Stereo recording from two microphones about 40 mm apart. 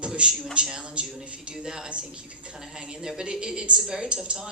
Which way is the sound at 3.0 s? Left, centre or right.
Centre.